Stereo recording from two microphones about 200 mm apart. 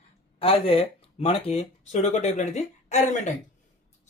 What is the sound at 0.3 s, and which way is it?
Speech, 30° left (ahead or behind).